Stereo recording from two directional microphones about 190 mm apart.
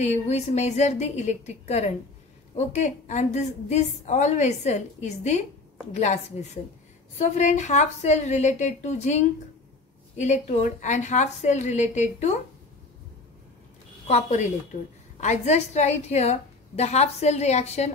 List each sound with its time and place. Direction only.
0.0 s a woman's voice: 35° left (ahead or behind)
7.2 s a woman's voice: 35° left (ahead or behind)
14.0 s a woman's voice: 35° left (ahead or behind)